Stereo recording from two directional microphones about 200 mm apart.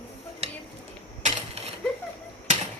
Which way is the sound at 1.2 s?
30° right (ahead or behind).